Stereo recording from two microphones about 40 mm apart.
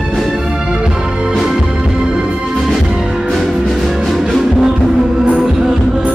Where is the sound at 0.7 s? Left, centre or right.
Right.